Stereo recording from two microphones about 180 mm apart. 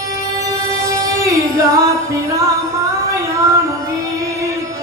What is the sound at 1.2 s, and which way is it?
Singing, 20° right (ahead or behind).